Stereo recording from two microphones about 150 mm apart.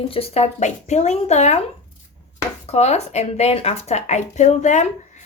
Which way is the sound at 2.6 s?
45° left (ahead or behind).